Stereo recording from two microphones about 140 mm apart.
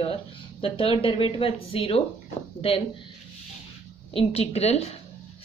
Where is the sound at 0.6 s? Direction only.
40° left (ahead or behind).